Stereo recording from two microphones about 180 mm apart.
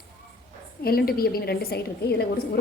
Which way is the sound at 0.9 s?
55° left (ahead or behind).